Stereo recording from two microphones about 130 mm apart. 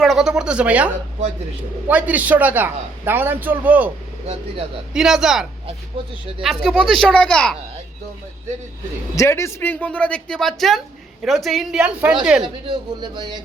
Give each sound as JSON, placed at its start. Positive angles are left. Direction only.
{"t": 0.0, "sound": "a man's voice", "side_deg": 0}
{"t": 1.9, "sound": "a man's voice", "side_deg": -10}
{"t": 4.9, "sound": "speech", "side_deg": -5}
{"t": 9.1, "sound": "speech", "side_deg": 20}
{"t": 12.4, "sound": "speech", "side_deg": -35}